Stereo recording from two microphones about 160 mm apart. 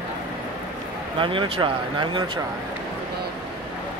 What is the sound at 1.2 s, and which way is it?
Speech, 30° right (ahead or behind).